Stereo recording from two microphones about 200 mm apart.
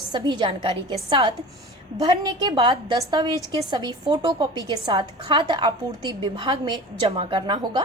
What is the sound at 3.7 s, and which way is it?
A woman's voice, 20° right (ahead or behind).